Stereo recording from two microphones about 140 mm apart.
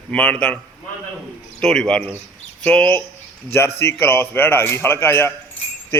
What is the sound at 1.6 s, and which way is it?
A man's voice, 5° left (ahead or behind).